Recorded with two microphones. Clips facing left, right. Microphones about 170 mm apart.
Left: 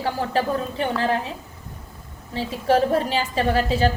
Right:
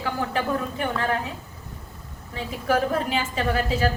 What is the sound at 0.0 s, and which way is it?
Speech, 35° left (ahead or behind).